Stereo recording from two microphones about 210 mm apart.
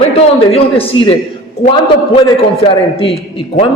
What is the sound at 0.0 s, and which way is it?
A man's voice, 30° left (ahead or behind).